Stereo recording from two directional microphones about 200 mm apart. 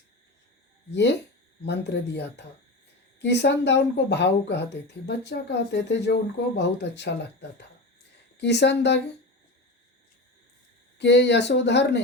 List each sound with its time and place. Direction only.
0.9 s speech: 60° left (ahead or behind)
8.4 s speech: 60° left (ahead or behind)
10.9 s speech: 60° left (ahead or behind)